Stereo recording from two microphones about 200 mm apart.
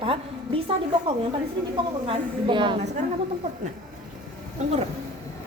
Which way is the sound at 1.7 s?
25° right (ahead or behind).